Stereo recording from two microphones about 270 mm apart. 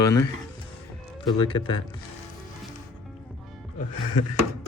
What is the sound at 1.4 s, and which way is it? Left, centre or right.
Speech, centre.